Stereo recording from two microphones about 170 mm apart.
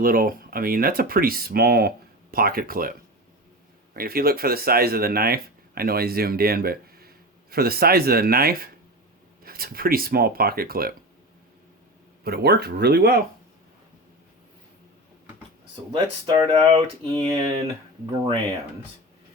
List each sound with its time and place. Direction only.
0.0 s speech: 55° right (ahead or behind)
3.9 s speech: 60° right (ahead or behind)
12.2 s speech: 70° right (ahead or behind)
15.9 s speech: 25° right (ahead or behind)